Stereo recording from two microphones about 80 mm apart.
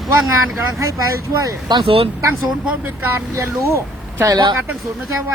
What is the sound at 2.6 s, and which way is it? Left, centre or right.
Speech, centre.